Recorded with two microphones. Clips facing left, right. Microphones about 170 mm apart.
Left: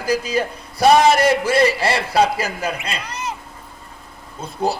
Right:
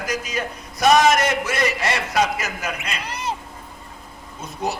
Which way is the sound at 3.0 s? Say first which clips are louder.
Right 1 dB; 30° right (ahead or behind).